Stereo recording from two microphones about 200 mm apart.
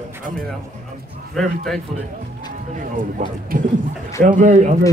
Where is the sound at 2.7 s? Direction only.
40° right (ahead or behind).